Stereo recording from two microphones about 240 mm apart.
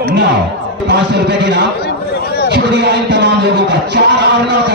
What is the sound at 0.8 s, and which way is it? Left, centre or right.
Speech, right.